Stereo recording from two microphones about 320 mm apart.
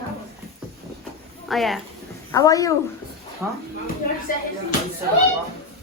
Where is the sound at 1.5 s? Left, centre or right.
Centre.